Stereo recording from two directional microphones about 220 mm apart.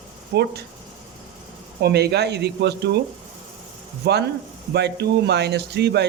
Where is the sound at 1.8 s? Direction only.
45° right (ahead or behind).